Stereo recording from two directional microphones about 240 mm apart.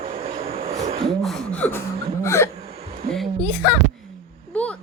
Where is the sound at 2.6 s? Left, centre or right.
Right.